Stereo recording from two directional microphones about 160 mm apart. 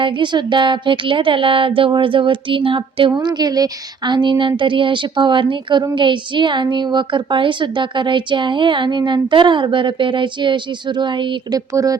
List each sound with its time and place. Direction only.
0.0 s speech: 30° right (ahead or behind)